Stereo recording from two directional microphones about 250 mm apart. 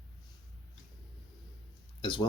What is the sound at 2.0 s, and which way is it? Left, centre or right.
Speech, centre.